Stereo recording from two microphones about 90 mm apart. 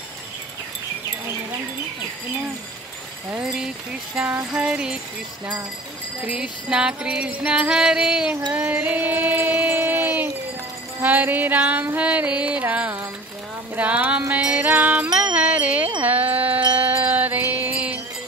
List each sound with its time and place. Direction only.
3.3 s music: 10° right (ahead or behind)
6.2 s music: 10° right (ahead or behind)
8.5 s a sound: 15° right (ahead or behind)
11.0 s music: 20° right (ahead or behind)
16.0 s a sound: 20° right (ahead or behind)
16.8 s music: 20° right (ahead or behind)